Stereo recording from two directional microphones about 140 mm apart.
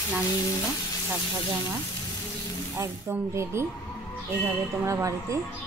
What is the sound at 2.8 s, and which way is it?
Speech, 20° right (ahead or behind).